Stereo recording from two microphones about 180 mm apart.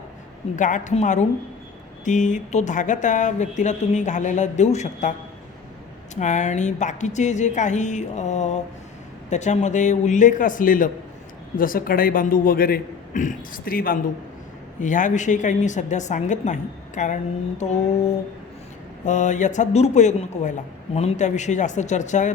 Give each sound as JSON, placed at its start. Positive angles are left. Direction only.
{"t": 0.5, "sound": "speech", "side_deg": 45}
{"t": 6.1, "sound": "a man's voice", "side_deg": 40}
{"t": 19.0, "sound": "a man's voice", "side_deg": 45}